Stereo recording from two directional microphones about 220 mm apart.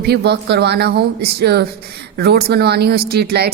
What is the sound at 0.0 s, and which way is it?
A woman's voice, 45° right (ahead or behind).